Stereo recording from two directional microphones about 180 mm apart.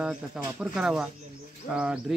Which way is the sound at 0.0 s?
5° right (ahead or behind).